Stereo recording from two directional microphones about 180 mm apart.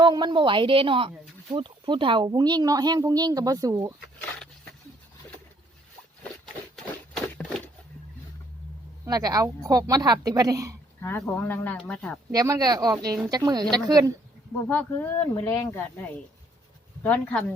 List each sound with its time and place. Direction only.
0.0 s speech: 25° right (ahead or behind)
6.4 s a sound: 5° left (ahead or behind)
9.0 s speech: 20° right (ahead or behind)
11.0 s speech: 10° left (ahead or behind)
12.3 s speech: 20° right (ahead or behind)
14.7 s speech: 10° left (ahead or behind)